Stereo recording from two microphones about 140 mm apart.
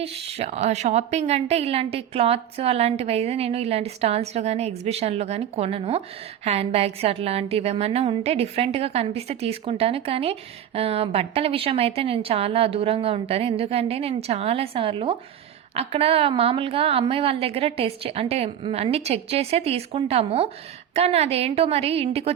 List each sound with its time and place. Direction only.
0.0 s a woman's voice: 50° right (ahead or behind)